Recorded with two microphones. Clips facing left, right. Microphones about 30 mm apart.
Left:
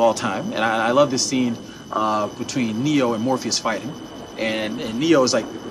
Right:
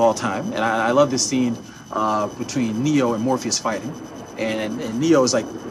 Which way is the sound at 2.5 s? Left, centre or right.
Left.